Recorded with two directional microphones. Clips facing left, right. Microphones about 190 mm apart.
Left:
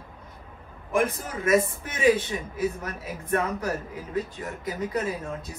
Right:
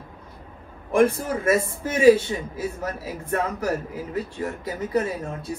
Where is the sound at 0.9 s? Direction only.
30° right (ahead or behind).